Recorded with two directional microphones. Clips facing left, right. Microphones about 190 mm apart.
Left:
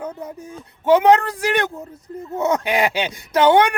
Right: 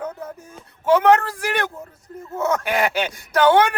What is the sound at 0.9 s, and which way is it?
Speech, 15° left (ahead or behind).